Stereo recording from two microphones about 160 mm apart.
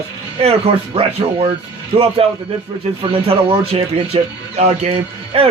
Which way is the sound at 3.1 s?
35° right (ahead or behind).